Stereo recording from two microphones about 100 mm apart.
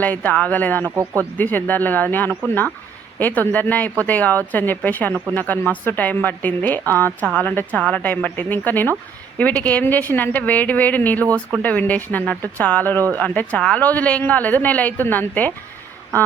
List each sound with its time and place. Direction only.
0.0 s speech: 15° left (ahead or behind)
0.9 s speech: 30° right (ahead or behind)
1.4 s a woman's voice: 15° left (ahead or behind)